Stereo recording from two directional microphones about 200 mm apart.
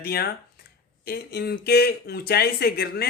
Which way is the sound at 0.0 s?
50° left (ahead or behind).